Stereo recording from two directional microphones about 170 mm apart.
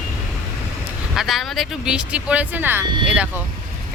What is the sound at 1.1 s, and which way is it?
Speech, centre (ahead or behind).